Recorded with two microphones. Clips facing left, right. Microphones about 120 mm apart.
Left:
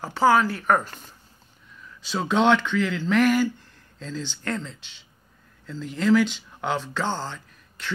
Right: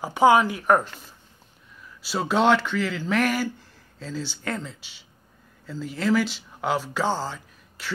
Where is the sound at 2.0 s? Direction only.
5° right (ahead or behind).